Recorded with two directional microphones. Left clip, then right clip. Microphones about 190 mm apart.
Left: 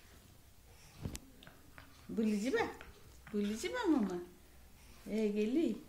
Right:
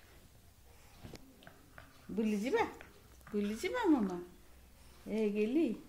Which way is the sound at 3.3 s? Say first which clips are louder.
Right 2 dB; centre (ahead or behind).